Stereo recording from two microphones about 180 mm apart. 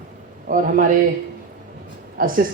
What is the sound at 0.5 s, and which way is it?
Speech, 50° right (ahead or behind).